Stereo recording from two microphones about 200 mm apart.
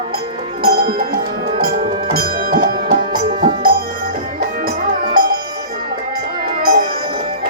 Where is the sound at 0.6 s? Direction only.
50° right (ahead or behind).